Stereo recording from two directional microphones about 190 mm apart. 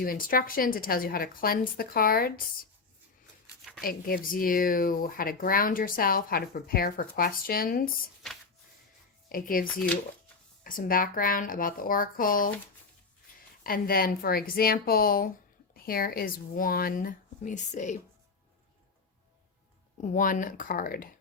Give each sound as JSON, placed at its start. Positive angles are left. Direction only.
{"t": 0.0, "sound": "speech", "side_deg": 50}
{"t": 3.4, "sound": "a sound", "side_deg": 0}
{"t": 3.8, "sound": "speech", "side_deg": 50}
{"t": 9.3, "sound": "speech", "side_deg": 45}
{"t": 13.7, "sound": "speech", "side_deg": 50}
{"t": 20.0, "sound": "speech", "side_deg": 45}